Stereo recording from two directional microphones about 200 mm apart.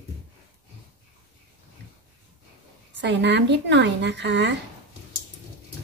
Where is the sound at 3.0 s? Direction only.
60° right (ahead or behind).